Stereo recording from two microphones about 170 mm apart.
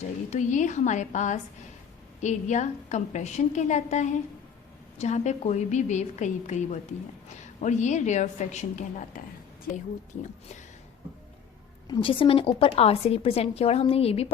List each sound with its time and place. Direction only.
0.3 s a woman's voice: 45° left (ahead or behind)
11.9 s a woman's voice: 30° left (ahead or behind)